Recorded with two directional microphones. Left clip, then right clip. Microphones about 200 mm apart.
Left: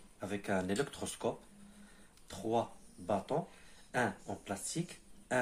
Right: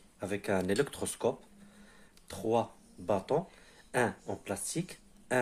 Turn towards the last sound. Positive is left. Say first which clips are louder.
# right 3 dB
turn(degrees=-50)  # may be behind; listen again after turning